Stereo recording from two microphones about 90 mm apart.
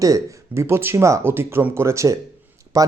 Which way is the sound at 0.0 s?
35° right (ahead or behind).